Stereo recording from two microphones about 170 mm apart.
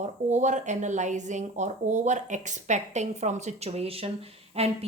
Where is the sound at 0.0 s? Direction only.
45° right (ahead or behind).